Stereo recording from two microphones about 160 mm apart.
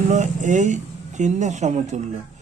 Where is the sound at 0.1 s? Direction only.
50° right (ahead or behind).